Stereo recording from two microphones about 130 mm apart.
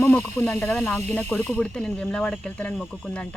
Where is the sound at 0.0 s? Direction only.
15° left (ahead or behind).